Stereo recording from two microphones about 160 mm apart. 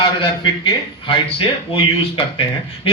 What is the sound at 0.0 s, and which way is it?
Speech, 30° left (ahead or behind).